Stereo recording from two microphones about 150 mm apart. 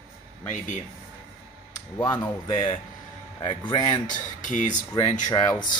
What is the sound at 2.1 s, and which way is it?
Speech, 30° left (ahead or behind).